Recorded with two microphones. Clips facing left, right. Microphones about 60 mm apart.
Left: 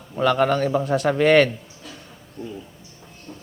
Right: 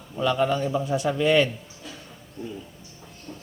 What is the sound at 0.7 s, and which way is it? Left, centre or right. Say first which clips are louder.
Speech: left 4 dB; left.